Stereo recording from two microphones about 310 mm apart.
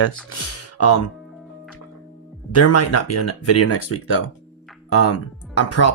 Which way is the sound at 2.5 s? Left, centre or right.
Left.